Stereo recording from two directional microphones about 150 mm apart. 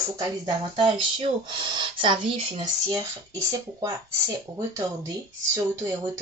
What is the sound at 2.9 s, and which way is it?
Speech, 20° right (ahead or behind).